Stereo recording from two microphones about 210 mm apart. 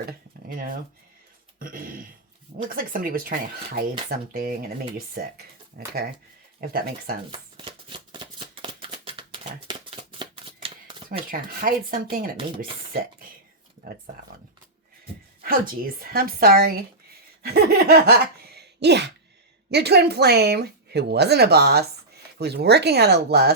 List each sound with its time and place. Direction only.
0.4 s a woman's voice: 40° right (ahead or behind)
7.3 s shuffling cards: 25° right (ahead or behind)
11.3 s a woman's voice: 40° right (ahead or behind)
15.4 s a woman's voice: 45° right (ahead or behind)
18.5 s a sound: 55° right (ahead or behind)
19.7 s a woman's voice: 50° right (ahead or behind)